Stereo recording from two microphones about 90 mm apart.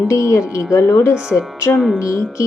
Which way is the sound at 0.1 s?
35° left (ahead or behind).